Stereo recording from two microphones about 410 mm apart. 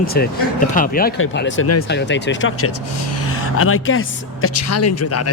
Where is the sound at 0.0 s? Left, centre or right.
Left.